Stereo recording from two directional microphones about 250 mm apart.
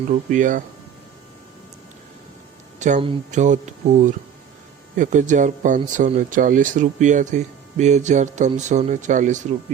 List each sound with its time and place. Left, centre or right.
0.3 s speech: right
2.7 s speech: right